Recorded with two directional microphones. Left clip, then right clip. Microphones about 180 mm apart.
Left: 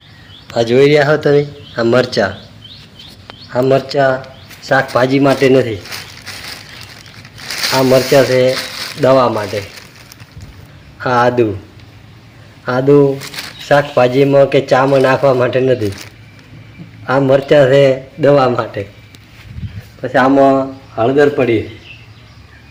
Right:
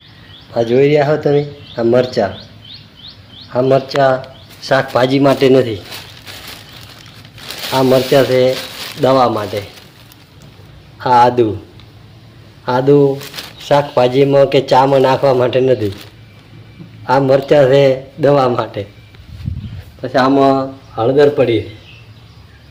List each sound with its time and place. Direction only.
0.5 s a man's voice: centre (ahead or behind)
3.5 s speech: 5° right (ahead or behind)
7.7 s a man's voice: 5° right (ahead or behind)
11.0 s a man's voice: centre (ahead or behind)
12.6 s a man's voice: centre (ahead or behind)
17.1 s a man's voice: centre (ahead or behind)
20.0 s speech: 5° left (ahead or behind)